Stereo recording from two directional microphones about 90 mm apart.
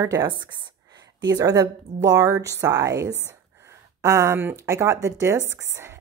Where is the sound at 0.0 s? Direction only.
35° right (ahead or behind).